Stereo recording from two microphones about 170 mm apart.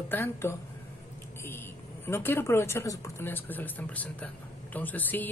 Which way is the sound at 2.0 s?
15° left (ahead or behind).